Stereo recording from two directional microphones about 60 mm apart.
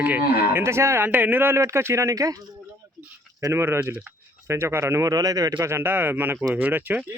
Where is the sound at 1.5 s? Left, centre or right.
Right.